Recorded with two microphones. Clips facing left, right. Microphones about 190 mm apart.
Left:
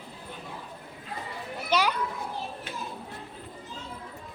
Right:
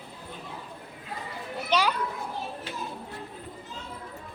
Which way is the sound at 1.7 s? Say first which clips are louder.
Even; 10° left (ahead or behind).